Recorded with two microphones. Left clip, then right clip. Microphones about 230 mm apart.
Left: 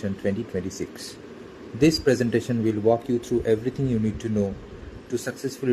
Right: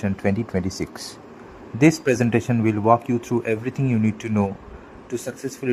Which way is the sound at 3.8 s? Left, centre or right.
Right.